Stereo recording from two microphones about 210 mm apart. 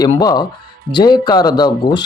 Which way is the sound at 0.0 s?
20° left (ahead or behind).